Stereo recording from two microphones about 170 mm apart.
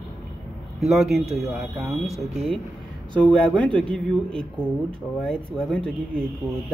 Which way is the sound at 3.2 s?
5° left (ahead or behind).